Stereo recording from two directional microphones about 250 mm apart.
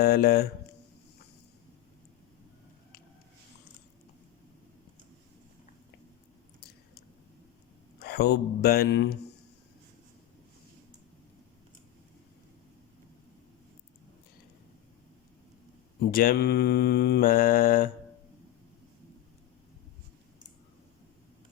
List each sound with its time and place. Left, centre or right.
0.0 s mantra: left
7.9 s speech: left
16.1 s mantra: left